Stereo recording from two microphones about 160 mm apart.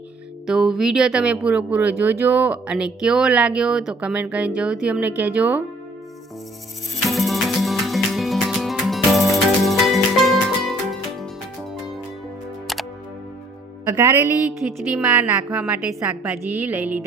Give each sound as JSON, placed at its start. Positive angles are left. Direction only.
{"t": 0.4, "sound": "speech", "side_deg": 0}
{"t": 7.1, "sound": "music", "side_deg": 0}
{"t": 13.9, "sound": "speech", "side_deg": -15}